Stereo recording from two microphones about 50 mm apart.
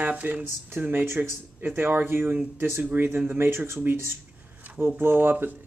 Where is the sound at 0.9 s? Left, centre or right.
Right.